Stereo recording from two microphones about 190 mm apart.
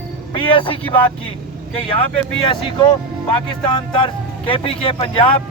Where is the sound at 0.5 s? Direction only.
25° left (ahead or behind).